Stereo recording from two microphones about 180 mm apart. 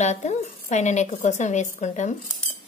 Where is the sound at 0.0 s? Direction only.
40° left (ahead or behind).